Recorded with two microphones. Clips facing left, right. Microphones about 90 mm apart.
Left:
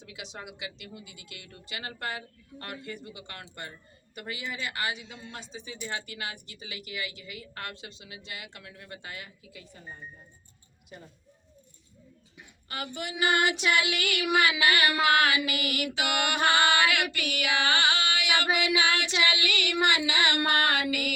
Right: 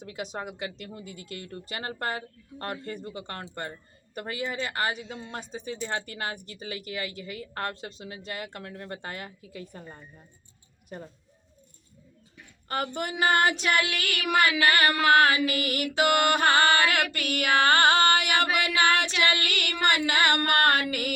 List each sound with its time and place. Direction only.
0.0 s music: 45° right (ahead or behind)
0.9 s speech: 40° right (ahead or behind)
9.8 s speech: 60° right (ahead or behind)
10.8 s speech: 40° right (ahead or behind)
12.6 s speech: 40° right (ahead or behind)
13.8 s child singing: 20° left (ahead or behind)
14.3 s music: 40° right (ahead or behind)
14.7 s speech: 40° right (ahead or behind)
16.0 s music: 40° right (ahead or behind)